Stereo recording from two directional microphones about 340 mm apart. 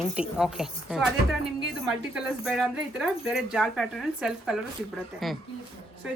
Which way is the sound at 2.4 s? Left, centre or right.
Centre.